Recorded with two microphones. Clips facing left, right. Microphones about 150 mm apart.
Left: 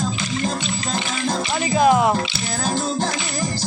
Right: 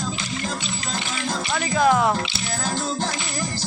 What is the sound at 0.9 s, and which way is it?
Music, 20° left (ahead or behind).